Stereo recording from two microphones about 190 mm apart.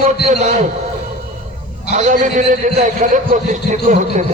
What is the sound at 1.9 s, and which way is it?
A man's voice, 40° right (ahead or behind).